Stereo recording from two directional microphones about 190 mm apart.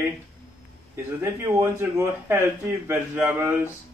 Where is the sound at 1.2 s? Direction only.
15° right (ahead or behind).